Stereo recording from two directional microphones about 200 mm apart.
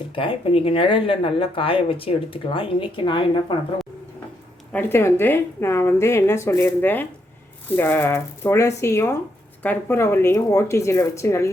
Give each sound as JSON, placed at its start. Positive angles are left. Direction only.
{"t": 0.1, "sound": "speech", "side_deg": 25}
{"t": 4.7, "sound": "a woman's voice", "side_deg": 10}